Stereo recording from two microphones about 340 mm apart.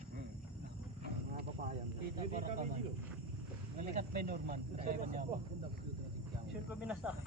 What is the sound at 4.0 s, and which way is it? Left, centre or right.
Speech, right.